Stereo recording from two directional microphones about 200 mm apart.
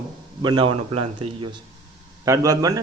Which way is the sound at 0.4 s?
25° right (ahead or behind).